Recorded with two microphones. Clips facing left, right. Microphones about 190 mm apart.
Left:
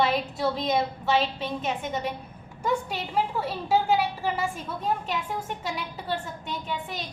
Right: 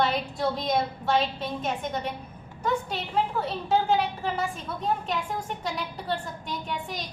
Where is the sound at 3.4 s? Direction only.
5° left (ahead or behind).